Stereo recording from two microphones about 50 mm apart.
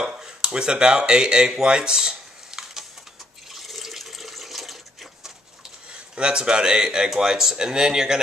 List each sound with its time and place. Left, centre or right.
0.0 s a sound: centre
3.5 s water tap: centre
6.1 s speech: centre